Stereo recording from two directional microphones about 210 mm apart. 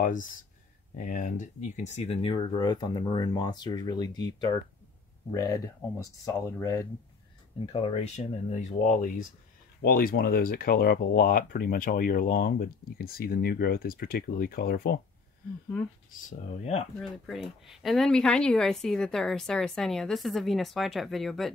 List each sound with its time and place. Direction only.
0.0 s speech: 40° left (ahead or behind); by 4.3 s 20° left (ahead or behind)
5.3 s speech: 15° left (ahead or behind)
7.6 s speech: 25° left (ahead or behind); by 15.0 s 45° left (ahead or behind)
16.3 s speech: 35° left (ahead or behind)
17.0 s speech: centre (ahead or behind)